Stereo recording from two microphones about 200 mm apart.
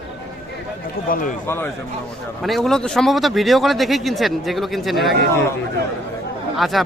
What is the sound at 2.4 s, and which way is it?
Speech, centre (ahead or behind).